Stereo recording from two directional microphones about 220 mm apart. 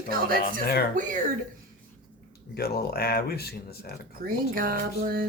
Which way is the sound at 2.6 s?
45° left (ahead or behind).